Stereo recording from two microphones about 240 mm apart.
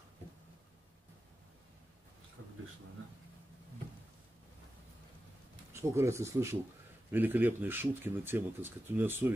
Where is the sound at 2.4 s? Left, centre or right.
Right.